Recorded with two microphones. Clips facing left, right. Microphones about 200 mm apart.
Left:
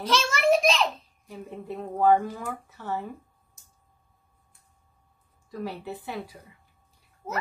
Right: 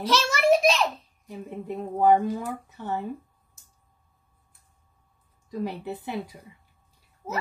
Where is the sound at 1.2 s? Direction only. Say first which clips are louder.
Right 3 dB; 20° right (ahead or behind).